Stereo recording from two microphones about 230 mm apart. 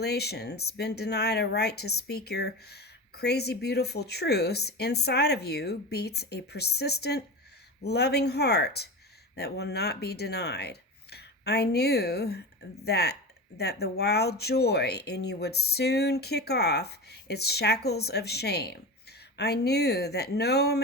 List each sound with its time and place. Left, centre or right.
0.0 s speech: left